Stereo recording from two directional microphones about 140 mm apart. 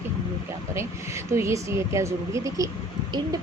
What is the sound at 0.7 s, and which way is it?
Speech, 20° right (ahead or behind).